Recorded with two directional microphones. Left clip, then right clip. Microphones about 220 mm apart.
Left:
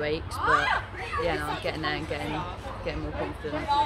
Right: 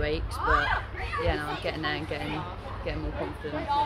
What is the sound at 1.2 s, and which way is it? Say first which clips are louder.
Speech: left 1 dB; centre (ahead or behind).